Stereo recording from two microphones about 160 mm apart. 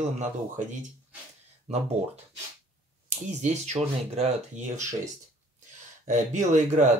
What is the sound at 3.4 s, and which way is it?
Speech, 45° right (ahead or behind).